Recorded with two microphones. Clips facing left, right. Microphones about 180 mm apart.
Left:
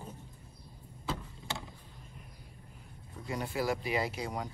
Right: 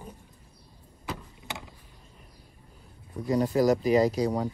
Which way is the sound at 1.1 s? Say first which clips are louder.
Right 1 dB; 20° right (ahead or behind).